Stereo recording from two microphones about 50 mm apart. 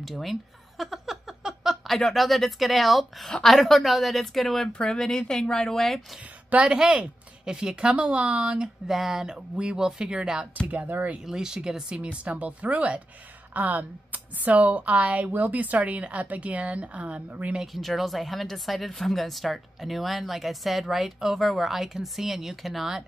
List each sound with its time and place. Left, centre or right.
0.0 s a sound: centre
2.0 s speech: centre
6.5 s speech: centre
8.8 s speech: centre
10.7 s speech: right
11.2 s speech: centre
12.0 s speech: right
17.7 s speech: centre